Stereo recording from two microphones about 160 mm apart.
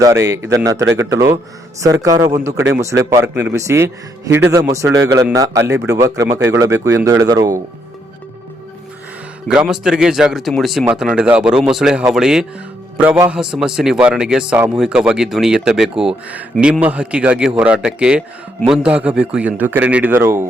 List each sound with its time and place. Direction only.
0.0 s a man's voice: 20° right (ahead or behind)
9.5 s a man's voice: 5° right (ahead or behind)